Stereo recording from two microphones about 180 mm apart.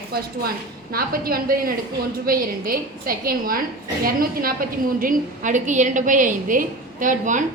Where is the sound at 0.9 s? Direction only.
55° right (ahead or behind).